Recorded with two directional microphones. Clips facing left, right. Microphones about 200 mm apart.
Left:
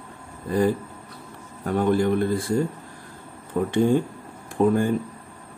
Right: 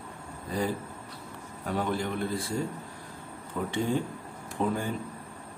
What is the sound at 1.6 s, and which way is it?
Speech, 50° left (ahead or behind).